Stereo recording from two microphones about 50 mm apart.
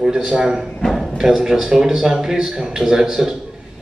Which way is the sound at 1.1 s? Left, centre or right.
Centre.